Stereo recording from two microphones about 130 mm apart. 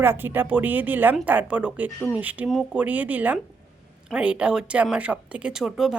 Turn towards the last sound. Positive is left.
turn(degrees=-5)  # may be behind; listen again after turning